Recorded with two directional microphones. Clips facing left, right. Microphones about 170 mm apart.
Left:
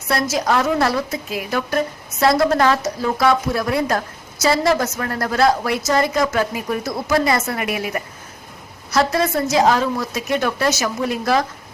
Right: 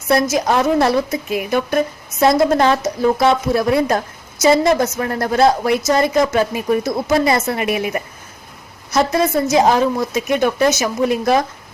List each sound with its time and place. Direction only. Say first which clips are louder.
0.1 s a woman's voice: right 4 dB; 20° right (ahead or behind)